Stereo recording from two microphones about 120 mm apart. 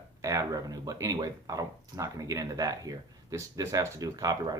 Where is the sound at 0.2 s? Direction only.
30° right (ahead or behind).